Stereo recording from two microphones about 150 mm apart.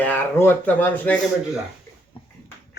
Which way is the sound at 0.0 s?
10° left (ahead or behind).